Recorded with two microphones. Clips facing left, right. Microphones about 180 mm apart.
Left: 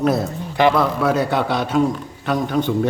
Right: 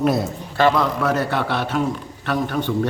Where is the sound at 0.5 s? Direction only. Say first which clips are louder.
Left 1 dB; 10° left (ahead or behind).